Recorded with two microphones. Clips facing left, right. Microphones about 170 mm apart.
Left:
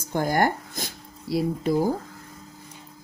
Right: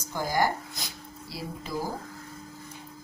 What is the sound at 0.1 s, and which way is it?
Speech, 55° left (ahead or behind).